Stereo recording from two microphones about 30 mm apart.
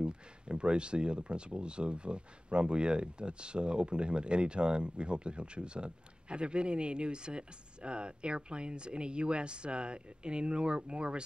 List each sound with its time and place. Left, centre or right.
0.0 s speech: right